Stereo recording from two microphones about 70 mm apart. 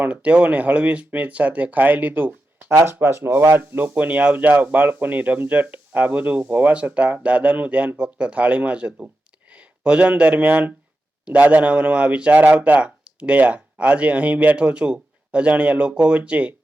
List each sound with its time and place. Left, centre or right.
0.0 s speech: centre